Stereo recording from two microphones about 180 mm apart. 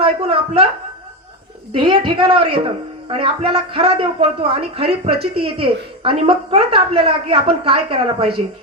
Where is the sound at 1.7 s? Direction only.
30° right (ahead or behind).